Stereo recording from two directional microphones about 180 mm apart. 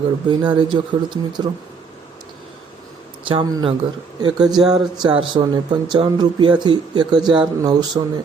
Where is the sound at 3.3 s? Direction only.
25° right (ahead or behind).